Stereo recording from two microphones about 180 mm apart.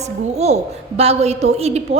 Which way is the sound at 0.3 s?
35° right (ahead or behind).